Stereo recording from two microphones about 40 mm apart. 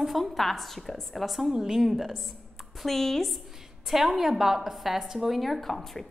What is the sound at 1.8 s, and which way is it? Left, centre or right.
Speech, centre.